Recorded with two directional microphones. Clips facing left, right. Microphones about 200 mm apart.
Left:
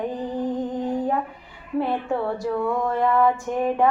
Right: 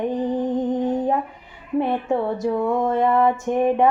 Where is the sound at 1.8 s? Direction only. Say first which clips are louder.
Right 2 dB; 20° right (ahead or behind).